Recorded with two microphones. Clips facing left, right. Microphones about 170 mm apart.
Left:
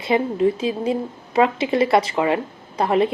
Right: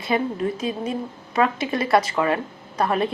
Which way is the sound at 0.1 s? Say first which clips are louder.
Left 5 dB; 25° left (ahead or behind).